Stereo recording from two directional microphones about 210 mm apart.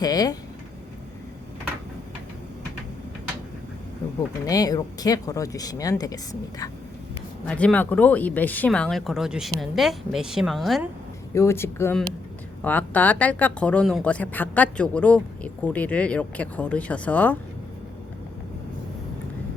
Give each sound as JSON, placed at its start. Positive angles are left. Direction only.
{"t": 0.0, "sound": "speech", "side_deg": 20}
{"t": 4.4, "sound": "speech", "side_deg": 15}
{"t": 7.4, "sound": "speech", "side_deg": 5}
{"t": 11.3, "sound": "speech", "side_deg": 10}